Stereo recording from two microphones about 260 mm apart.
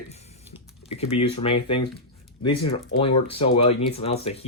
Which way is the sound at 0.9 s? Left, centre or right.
Left.